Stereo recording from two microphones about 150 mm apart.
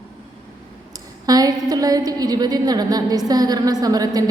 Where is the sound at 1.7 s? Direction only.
25° right (ahead or behind).